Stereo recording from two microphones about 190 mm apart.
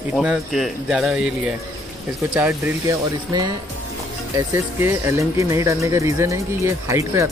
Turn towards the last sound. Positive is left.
turn(degrees=-15)  # may be behind; listen again after turning